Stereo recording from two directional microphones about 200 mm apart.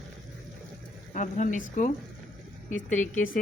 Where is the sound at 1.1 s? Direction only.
40° left (ahead or behind).